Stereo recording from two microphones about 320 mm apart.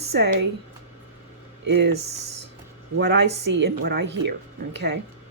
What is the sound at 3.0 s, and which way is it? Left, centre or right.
A woman's voice, right.